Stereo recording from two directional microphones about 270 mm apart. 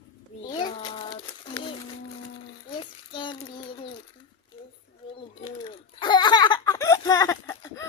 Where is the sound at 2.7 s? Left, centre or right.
Centre.